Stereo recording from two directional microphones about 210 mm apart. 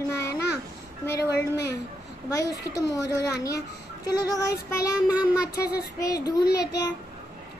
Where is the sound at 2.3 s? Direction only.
15° left (ahead or behind).